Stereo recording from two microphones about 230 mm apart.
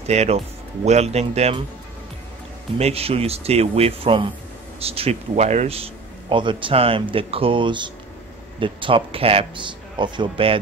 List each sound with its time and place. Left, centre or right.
0.0 s a man's voice: right
2.8 s a man's voice: right